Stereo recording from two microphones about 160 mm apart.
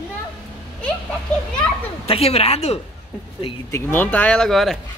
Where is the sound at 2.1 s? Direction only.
40° left (ahead or behind).